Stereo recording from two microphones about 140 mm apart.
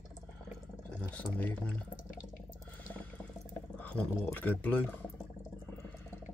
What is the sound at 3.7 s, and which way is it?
Speech, 10° left (ahead or behind).